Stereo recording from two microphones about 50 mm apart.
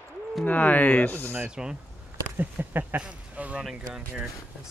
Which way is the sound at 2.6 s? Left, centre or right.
Right.